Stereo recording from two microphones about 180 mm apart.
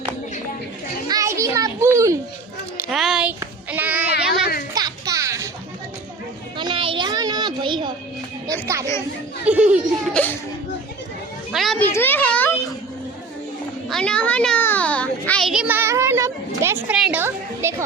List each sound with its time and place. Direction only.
1.0 s children playing: 20° right (ahead or behind)
2.9 s a sound: centre (ahead or behind)
3.4 s child singing: 10° right (ahead or behind)
4.7 s music: 20° right (ahead or behind)
6.6 s a sound: 30° right (ahead or behind)
8.6 s music: 15° right (ahead or behind)
9.5 s a child's voice: 5° right (ahead or behind)
10.2 s a sound: 5° left (ahead or behind)
11.5 s children playing: centre (ahead or behind)
11.8 s a sound: 10° left (ahead or behind)
13.9 s child singing: 5° left (ahead or behind); by 16.8 s 15° right (ahead or behind)
16.9 s speech: 5° right (ahead or behind)